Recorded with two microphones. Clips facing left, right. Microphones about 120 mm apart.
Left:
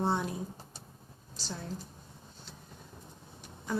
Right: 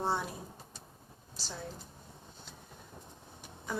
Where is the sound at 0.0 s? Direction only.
5° right (ahead or behind).